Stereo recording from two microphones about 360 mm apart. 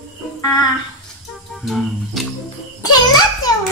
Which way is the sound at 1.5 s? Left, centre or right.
Centre.